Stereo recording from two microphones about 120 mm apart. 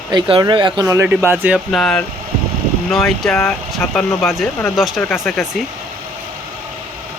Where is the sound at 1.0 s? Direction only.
15° right (ahead or behind).